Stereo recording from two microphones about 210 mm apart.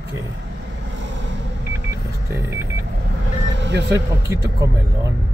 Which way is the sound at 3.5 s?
55° right (ahead or behind).